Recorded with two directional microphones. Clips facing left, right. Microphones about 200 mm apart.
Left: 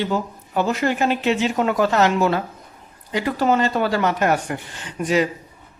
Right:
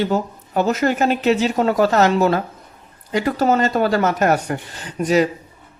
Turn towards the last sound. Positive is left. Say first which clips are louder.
# right 3 dB
turn(degrees=-40)  # may be behind; listen again after turning